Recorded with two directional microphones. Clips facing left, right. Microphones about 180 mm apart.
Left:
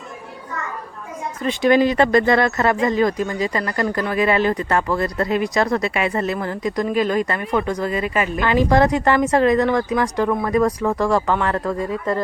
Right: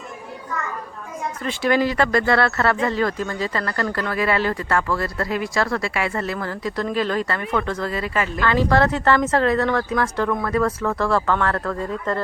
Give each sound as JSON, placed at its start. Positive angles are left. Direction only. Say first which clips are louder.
{"t": 1.4, "sound": "speech", "louder": "left 5 dB", "side_deg": 20}